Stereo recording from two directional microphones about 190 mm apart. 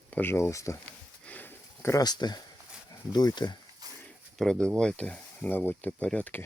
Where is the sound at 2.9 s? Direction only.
20° left (ahead or behind).